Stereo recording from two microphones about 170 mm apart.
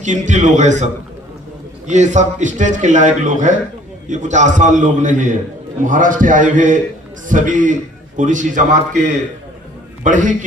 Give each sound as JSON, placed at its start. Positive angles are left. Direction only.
{"t": 0.0, "sound": "a man's voice", "side_deg": -45}
{"t": 1.9, "sound": "a man's voice", "side_deg": -45}